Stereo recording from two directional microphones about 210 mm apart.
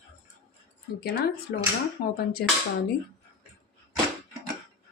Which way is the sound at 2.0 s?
45° left (ahead or behind).